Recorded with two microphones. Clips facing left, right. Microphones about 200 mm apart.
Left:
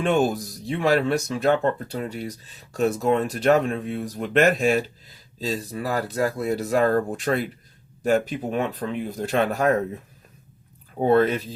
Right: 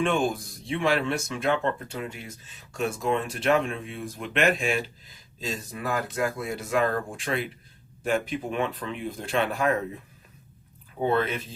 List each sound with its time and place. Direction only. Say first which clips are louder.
0.0 s speech: left 4 dB; 40° left (ahead or behind)
11.0 s speech: left 7 dB; 40° left (ahead or behind)